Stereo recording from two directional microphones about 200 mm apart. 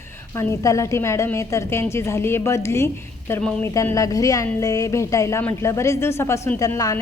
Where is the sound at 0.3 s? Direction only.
15° left (ahead or behind).